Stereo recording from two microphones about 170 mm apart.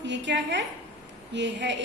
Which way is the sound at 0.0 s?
90° right.